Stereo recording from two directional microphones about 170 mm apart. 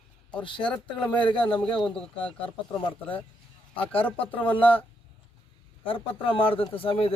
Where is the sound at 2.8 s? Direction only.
30° left (ahead or behind).